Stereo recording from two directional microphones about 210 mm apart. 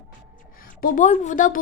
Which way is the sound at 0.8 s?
40° left (ahead or behind).